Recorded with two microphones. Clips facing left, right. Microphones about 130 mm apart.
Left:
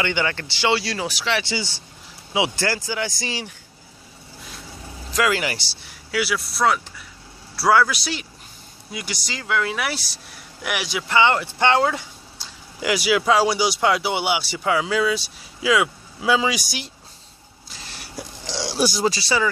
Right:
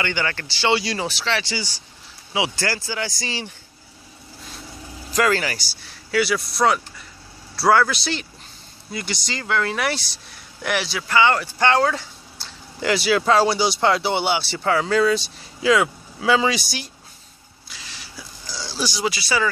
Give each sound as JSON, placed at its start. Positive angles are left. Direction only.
{"t": 0.0, "sound": "speech", "side_deg": 15}
{"t": 0.7, "sound": "speech", "side_deg": 0}
{"t": 1.2, "sound": "speech", "side_deg": 15}
{"t": 5.1, "sound": "speech", "side_deg": 5}
{"t": 5.4, "sound": "speech", "side_deg": 20}
{"t": 6.1, "sound": "speech", "side_deg": 5}
{"t": 17.6, "sound": "a sound", "side_deg": 40}
{"t": 17.9, "sound": "a sound", "side_deg": 55}
{"t": 18.4, "sound": "a sound", "side_deg": 85}
{"t": 19.0, "sound": "speech", "side_deg": 30}